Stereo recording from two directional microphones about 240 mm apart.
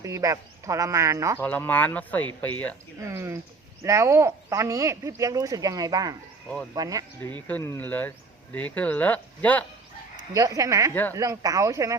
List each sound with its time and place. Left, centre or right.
0.0 s speech: centre
1.4 s speech: centre
3.0 s speech: centre
7.4 s speech: centre
10.3 s speech: centre